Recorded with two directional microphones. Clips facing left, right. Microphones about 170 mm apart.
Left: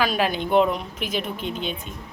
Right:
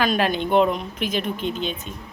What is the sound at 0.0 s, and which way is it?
Speech, 5° left (ahead or behind).